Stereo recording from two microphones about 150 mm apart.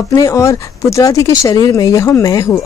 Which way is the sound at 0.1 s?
20° left (ahead or behind).